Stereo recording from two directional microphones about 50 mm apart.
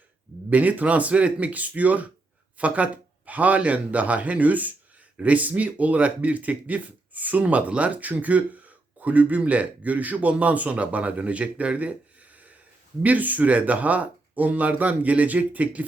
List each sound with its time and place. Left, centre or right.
0.5 s speech: right
13.0 s speech: right